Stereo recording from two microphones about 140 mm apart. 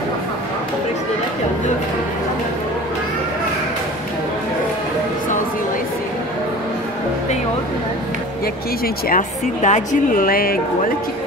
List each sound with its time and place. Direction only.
8.8 s speech: 70° left (ahead or behind); by 10.6 s 90° left